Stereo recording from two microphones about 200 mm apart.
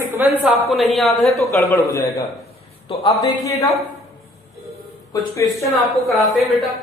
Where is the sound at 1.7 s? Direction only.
15° left (ahead or behind).